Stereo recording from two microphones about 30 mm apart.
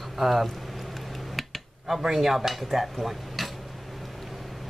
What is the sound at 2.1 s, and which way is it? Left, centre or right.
Speech, centre.